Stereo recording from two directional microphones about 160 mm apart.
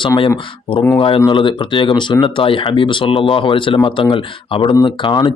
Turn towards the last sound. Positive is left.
turn(degrees=30)  # may be behind; listen again after turning